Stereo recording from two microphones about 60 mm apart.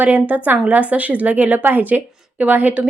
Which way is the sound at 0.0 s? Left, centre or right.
Right.